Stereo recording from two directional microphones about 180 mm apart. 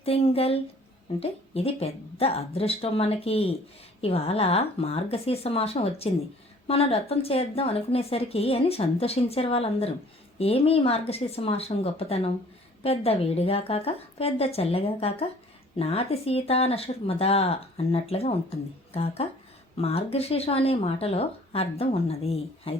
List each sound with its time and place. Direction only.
0.0 s speech: 30° left (ahead or behind)